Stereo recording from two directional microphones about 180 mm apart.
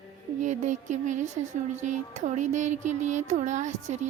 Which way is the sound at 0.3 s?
40° right (ahead or behind).